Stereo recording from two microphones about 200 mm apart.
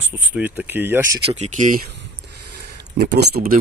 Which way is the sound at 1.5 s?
40° right (ahead or behind).